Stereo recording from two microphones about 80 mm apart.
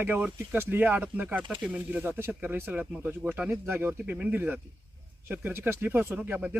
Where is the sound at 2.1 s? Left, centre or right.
Right.